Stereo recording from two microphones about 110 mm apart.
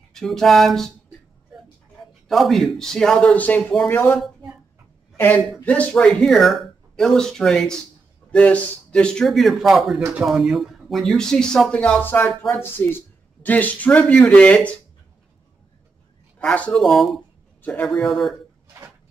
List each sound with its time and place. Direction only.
0.1 s speech: 5° left (ahead or behind)
2.2 s speech: centre (ahead or behind)
5.1 s speech: 20° left (ahead or behind)
16.3 s speech: 10° left (ahead or behind)
17.6 s a sound: 15° left (ahead or behind)
17.8 s speech: 5° left (ahead or behind)